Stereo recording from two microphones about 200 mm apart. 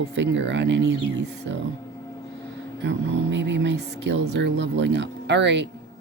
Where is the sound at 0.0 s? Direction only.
65° right (ahead or behind).